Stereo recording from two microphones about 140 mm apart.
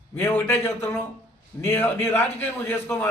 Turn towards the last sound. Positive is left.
turn(degrees=15)  # may be behind; listen again after turning